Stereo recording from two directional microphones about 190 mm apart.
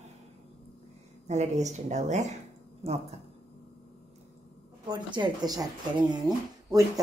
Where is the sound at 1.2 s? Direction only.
40° right (ahead or behind).